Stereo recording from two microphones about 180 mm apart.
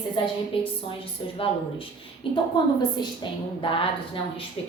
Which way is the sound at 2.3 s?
30° left (ahead or behind).